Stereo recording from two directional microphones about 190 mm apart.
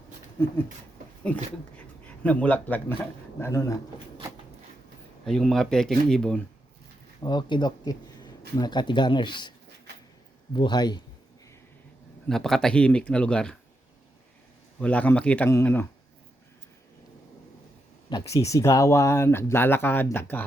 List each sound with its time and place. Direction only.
1.2 s speech: 5° left (ahead or behind)
5.2 s speech: centre (ahead or behind)
7.2 s speech: 20° left (ahead or behind)
10.5 s speech: 25° left (ahead or behind)
12.3 s speech: centre (ahead or behind)
14.8 s speech: 10° left (ahead or behind)
18.1 s speech: 15° left (ahead or behind)